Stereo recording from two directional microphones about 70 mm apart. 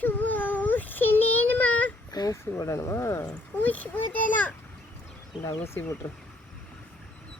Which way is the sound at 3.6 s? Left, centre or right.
Left.